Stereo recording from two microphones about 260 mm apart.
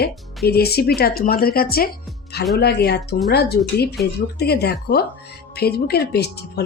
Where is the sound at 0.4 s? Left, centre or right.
Left.